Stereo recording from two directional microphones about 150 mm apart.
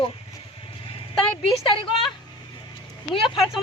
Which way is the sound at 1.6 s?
35° left (ahead or behind).